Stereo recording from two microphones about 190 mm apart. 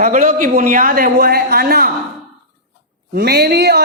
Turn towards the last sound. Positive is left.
turn(degrees=-60)  # may be behind; listen again after turning